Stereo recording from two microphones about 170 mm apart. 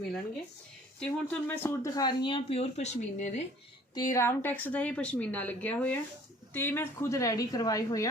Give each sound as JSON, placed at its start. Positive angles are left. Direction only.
{"t": 0.9, "sound": "speech", "side_deg": 10}
{"t": 3.9, "sound": "a woman's voice", "side_deg": 20}